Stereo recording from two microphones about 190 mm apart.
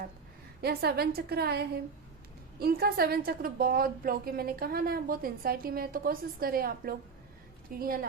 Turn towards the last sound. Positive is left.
turn(degrees=-50)  # may be behind; listen again after turning